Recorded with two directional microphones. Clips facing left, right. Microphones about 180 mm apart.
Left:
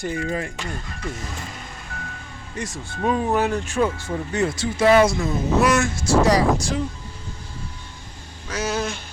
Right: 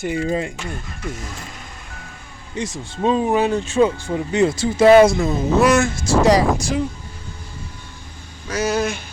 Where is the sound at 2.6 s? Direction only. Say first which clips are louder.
Right 4 dB; 20° right (ahead or behind).